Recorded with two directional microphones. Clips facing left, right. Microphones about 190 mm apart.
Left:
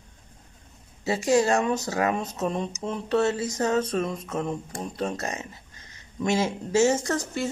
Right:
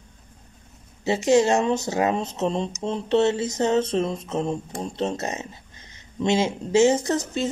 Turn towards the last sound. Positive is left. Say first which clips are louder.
# right 3 dB
turn(degrees=-20)  # may be behind; listen again after turning